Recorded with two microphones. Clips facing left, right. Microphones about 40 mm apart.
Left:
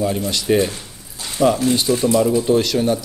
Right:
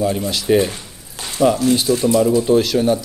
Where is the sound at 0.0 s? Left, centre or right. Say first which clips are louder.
Right 1 dB; centre.